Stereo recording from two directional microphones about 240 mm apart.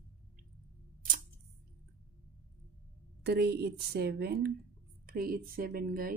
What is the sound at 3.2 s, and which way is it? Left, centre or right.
A woman's voice, right.